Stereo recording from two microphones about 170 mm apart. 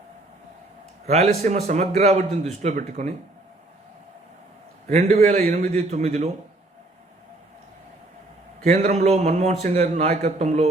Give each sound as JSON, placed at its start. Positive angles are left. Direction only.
{"t": 1.0, "sound": "a man's voice", "side_deg": -40}
{"t": 5.3, "sound": "a man's voice", "side_deg": -45}
{"t": 8.6, "sound": "a man's voice", "side_deg": -40}